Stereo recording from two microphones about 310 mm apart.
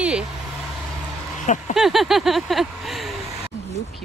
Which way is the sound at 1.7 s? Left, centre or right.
Centre.